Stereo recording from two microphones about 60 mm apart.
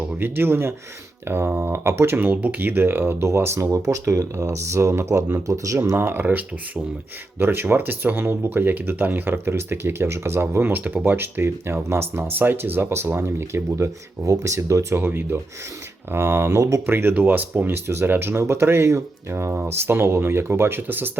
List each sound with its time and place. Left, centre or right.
0.2 s speech: right
2.1 s speech: right
3.2 s speech: right
6.0 s speech: right
14.9 s speech: right
16.5 s speech: right
16.8 s speech: right
17.8 s speech: right